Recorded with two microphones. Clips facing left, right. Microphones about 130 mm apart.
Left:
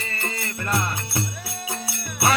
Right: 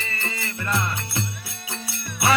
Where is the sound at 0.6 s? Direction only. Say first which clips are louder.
Even; 30° left (ahead or behind).